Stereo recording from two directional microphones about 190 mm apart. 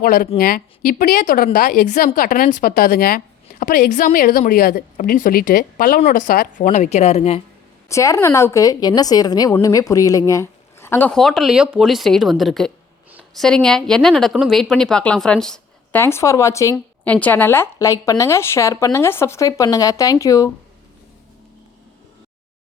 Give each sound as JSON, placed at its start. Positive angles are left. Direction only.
{"t": 0.0, "sound": "a woman's voice", "side_deg": 45}
{"t": 7.9, "sound": "a woman's voice", "side_deg": 15}